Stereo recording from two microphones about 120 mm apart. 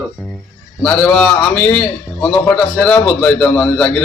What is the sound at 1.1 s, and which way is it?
A man's voice, 10° left (ahead or behind).